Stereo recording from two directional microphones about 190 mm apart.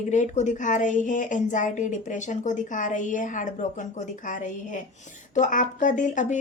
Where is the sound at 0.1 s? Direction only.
40° left (ahead or behind).